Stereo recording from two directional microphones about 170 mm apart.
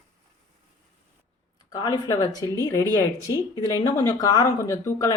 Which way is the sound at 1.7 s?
25° left (ahead or behind).